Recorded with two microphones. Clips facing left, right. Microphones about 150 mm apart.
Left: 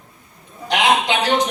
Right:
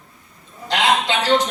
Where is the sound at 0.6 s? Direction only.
15° left (ahead or behind).